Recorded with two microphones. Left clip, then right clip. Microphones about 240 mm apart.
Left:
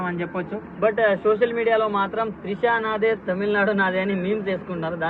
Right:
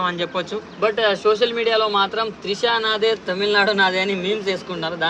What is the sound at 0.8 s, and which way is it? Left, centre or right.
Speech, right.